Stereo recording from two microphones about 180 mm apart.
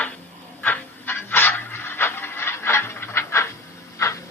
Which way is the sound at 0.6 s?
10° left (ahead or behind).